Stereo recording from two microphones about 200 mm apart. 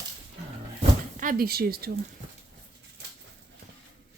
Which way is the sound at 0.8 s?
40° right (ahead or behind).